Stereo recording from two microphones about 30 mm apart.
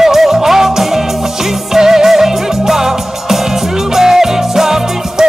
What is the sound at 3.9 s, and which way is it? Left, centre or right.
Music, centre.